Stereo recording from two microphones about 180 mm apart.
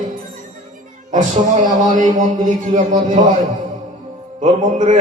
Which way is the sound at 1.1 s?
45° right (ahead or behind).